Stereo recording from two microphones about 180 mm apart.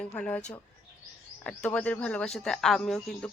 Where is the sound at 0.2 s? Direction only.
5° left (ahead or behind).